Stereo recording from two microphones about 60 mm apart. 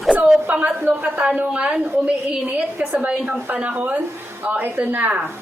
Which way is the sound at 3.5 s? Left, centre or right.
Right.